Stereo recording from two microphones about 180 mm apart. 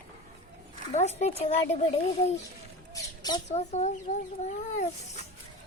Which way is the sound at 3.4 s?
40° left (ahead or behind).